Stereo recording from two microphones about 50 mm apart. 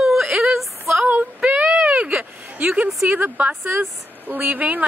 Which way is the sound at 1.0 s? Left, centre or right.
Right.